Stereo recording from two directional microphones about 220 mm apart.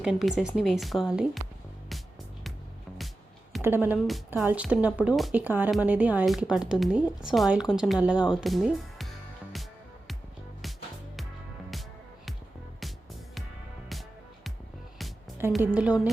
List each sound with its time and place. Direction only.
0.0 s a woman's voice: centre (ahead or behind)
3.6 s a woman's voice: 10° right (ahead or behind)
15.4 s a woman's voice: 10° right (ahead or behind)